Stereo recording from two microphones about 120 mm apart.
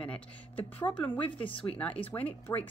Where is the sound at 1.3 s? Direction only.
45° left (ahead or behind).